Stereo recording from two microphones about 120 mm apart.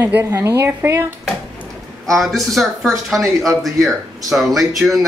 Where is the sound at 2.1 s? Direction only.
Centre (ahead or behind).